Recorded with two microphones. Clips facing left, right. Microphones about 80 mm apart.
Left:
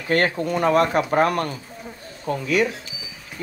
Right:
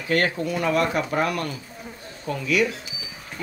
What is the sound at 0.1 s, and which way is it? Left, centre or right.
Speech, left.